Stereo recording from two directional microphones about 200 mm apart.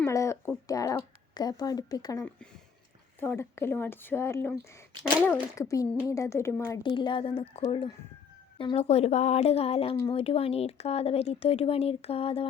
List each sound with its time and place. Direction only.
0.0 s a woman's voice: 15° left (ahead or behind)